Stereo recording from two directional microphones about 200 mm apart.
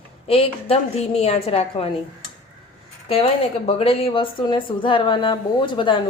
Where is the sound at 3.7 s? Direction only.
30° left (ahead or behind).